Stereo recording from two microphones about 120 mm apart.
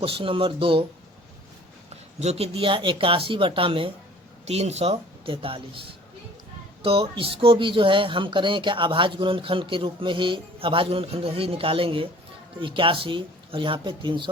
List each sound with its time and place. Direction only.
0.0 s speech: 50° right (ahead or behind)
2.1 s speech: 60° right (ahead or behind)
4.4 s speech: 65° right (ahead or behind); by 5.8 s 50° right (ahead or behind)
6.8 s speech: 50° right (ahead or behind)